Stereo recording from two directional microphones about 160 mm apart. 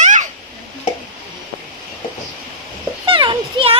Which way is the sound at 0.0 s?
50° right (ahead or behind).